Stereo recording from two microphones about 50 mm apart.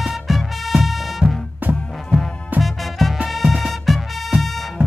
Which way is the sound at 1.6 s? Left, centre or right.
Right.